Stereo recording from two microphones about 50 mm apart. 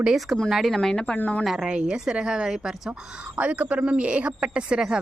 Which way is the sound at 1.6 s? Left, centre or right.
Centre.